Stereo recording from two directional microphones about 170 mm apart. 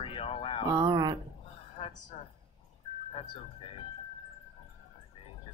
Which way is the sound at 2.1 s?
30° left (ahead or behind).